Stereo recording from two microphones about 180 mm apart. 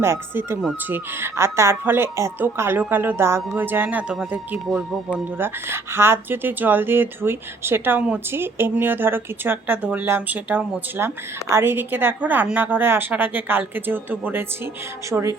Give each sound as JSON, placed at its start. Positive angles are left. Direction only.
{"t": 0.0, "sound": "speech", "side_deg": -15}